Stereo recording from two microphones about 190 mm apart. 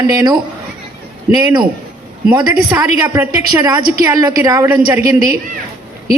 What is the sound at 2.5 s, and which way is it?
A man's voice, 20° right (ahead or behind).